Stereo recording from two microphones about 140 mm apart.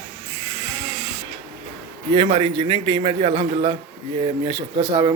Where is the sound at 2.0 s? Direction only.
35° right (ahead or behind).